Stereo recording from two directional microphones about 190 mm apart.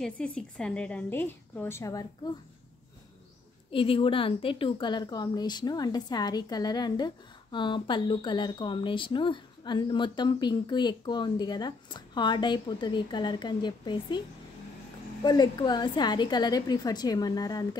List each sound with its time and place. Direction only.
0.0 s a woman's voice: 5° left (ahead or behind)
3.7 s speech: 30° left (ahead or behind)
15.2 s speech: 20° left (ahead or behind)